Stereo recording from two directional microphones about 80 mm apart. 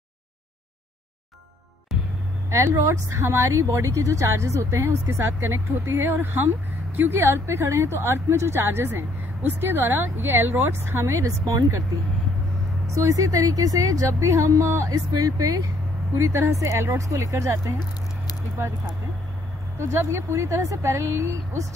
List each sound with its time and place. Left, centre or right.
2.5 s speech: right
12.8 s speech: right
16.2 s speech: right
19.8 s speech: right